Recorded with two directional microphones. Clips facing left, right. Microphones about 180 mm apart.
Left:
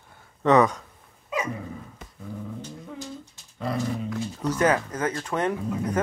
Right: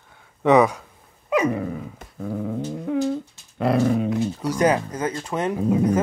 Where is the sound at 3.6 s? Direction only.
70° right (ahead or behind).